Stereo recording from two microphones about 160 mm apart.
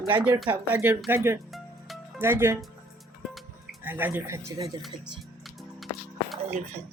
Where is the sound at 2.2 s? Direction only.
15° right (ahead or behind).